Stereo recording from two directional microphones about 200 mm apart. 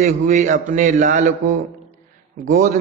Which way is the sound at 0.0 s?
40° right (ahead or behind).